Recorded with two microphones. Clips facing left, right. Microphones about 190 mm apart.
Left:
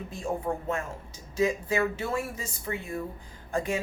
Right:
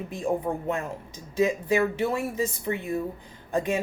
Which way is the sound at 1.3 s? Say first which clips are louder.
Right 3 dB; 20° right (ahead or behind).